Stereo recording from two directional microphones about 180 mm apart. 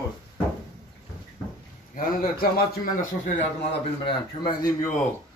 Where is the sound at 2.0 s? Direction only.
50° left (ahead or behind).